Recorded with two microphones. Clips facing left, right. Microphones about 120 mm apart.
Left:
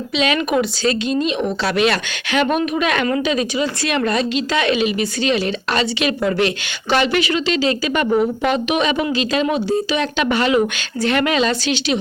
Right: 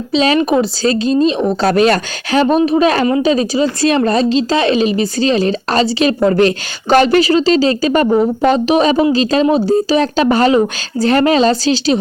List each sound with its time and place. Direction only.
0.1 s a woman's voice: 35° right (ahead or behind)